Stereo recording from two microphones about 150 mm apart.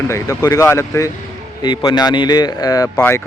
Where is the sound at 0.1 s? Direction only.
20° left (ahead or behind).